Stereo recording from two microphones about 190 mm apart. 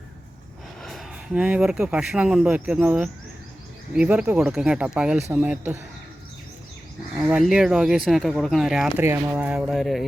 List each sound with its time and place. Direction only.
0.8 s speech: centre (ahead or behind)
7.2 s speech: 5° right (ahead or behind)